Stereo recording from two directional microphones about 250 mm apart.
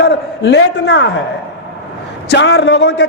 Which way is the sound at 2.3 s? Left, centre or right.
Left.